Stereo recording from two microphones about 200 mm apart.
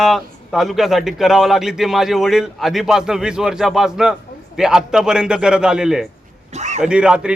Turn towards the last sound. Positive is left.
turn(degrees=-5)  # may be behind; listen again after turning